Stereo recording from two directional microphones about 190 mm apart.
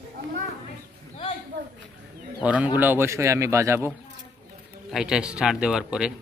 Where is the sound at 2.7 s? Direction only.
10° right (ahead or behind).